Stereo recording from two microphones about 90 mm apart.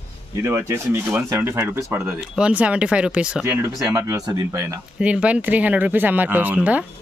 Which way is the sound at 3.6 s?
30° right (ahead or behind).